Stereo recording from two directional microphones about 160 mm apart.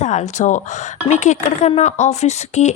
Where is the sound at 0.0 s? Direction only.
45° left (ahead or behind).